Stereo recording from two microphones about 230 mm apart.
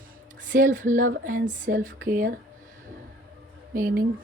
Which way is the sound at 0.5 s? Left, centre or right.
Right.